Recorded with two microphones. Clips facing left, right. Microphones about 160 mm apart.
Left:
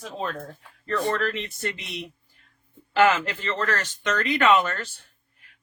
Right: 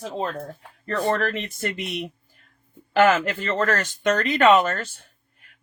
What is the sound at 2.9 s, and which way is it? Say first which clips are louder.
Speech: right 2 dB; 45° right (ahead or behind).